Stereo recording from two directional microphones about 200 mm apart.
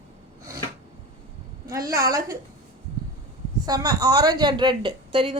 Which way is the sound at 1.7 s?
15° right (ahead or behind).